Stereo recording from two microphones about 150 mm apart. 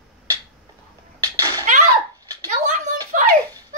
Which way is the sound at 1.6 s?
55° right (ahead or behind).